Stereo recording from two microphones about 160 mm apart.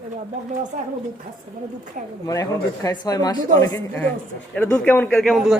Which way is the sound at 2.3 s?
20° left (ahead or behind).